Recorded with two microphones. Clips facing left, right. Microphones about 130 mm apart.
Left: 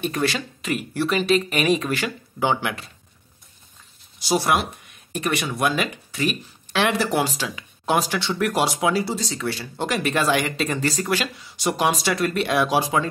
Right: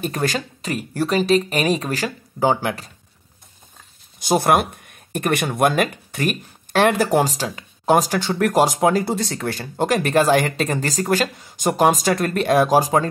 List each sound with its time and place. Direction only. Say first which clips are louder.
0.0 s speech: right 1 dB; 40° right (ahead or behind)
4.2 s speech: right 4 dB; 50° right (ahead or behind)